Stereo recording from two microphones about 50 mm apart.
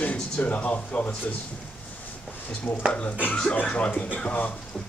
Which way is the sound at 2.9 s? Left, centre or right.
Left.